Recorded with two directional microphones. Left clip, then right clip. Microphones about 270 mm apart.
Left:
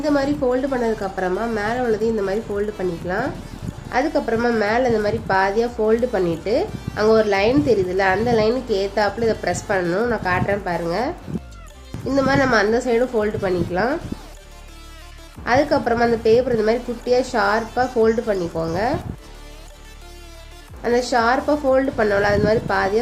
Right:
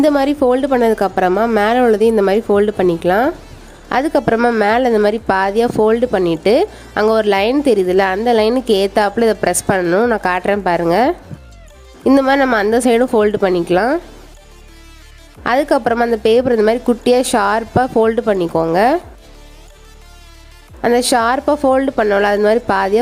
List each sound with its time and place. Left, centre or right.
0.0 s a woman's voice: right
15.4 s a woman's voice: right
20.8 s a woman's voice: right